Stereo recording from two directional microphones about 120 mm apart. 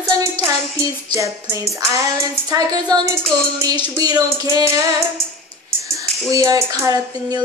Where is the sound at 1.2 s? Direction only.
25° right (ahead or behind).